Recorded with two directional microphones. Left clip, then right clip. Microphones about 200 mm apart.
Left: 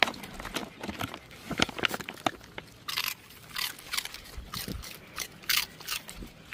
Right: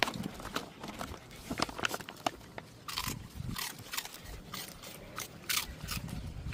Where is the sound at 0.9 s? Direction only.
25° left (ahead or behind).